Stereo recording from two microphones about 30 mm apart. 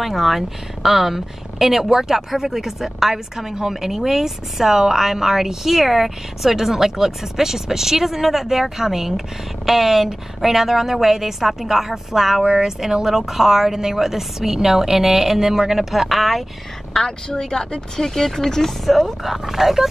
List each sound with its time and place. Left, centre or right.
0.0 s a woman's voice: centre
16.9 s a woman's voice: centre
19.2 s a woman's voice: centre